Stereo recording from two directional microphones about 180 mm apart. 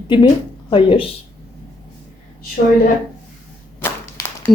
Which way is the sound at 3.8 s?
15° left (ahead or behind).